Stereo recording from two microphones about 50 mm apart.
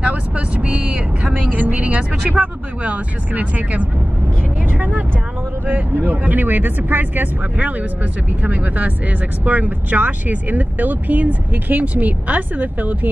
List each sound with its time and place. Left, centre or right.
0.0 s vehicle: right
2.3 s speech: right
4.7 s vehicle: right
5.7 s speech: right